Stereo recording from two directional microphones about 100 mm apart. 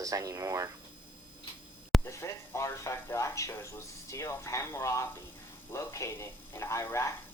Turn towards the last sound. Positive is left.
turn(degrees=25)  # may be behind; listen again after turning